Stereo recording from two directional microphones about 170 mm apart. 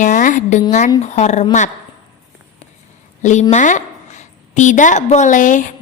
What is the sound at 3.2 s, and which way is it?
A woman's voice, 45° left (ahead or behind).